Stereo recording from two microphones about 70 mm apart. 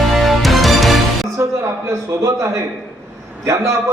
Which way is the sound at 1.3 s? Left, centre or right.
Right.